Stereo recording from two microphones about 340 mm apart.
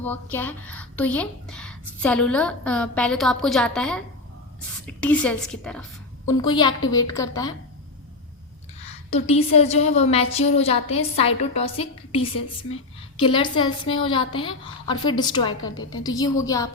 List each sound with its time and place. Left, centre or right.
0.0 s a woman's voice: centre
6.5 s a woman's voice: centre
9.6 s a woman's voice: centre